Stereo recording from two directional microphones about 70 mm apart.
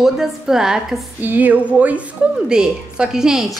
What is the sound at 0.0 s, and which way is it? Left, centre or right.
A woman's voice, centre.